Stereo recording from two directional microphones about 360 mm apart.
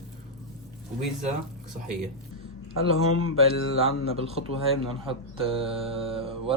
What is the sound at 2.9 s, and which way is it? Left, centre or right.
Speech, left.